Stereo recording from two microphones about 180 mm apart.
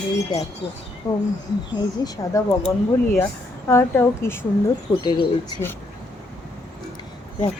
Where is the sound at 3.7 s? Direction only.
15° left (ahead or behind).